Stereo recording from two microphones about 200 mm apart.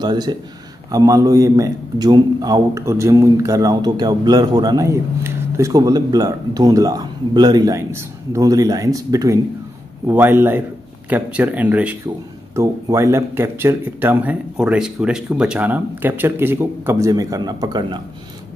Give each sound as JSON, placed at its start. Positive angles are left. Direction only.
{"t": 0.0, "sound": "a man's voice", "side_deg": -20}